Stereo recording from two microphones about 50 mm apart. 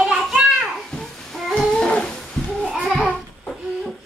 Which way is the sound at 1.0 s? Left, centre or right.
Centre.